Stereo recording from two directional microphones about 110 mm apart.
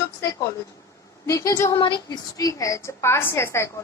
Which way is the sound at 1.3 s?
25° left (ahead or behind).